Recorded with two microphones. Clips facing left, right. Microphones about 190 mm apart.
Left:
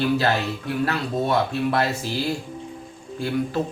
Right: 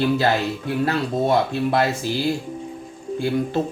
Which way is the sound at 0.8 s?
25° right (ahead or behind).